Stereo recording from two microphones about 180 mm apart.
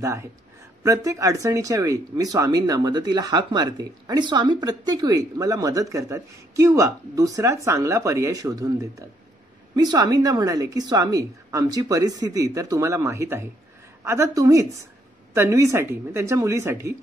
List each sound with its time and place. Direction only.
0.0 s a woman's voice: 15° right (ahead or behind)